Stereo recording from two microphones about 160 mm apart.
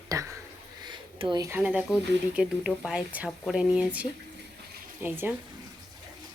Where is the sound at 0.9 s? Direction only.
30° right (ahead or behind).